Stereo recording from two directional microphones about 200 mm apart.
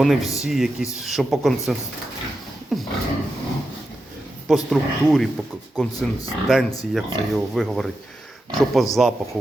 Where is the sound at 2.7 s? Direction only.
Centre (ahead or behind).